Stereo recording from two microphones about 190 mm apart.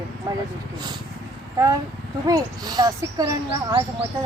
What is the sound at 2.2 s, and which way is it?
Speech, 20° right (ahead or behind).